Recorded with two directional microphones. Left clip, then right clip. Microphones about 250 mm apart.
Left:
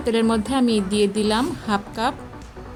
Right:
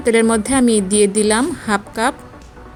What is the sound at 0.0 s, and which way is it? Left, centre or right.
A woman's voice, right.